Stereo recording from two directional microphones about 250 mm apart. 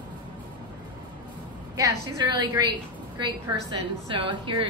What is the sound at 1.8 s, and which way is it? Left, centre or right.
Speech, centre.